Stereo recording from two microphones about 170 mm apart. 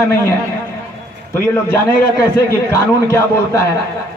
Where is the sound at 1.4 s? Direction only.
15° left (ahead or behind).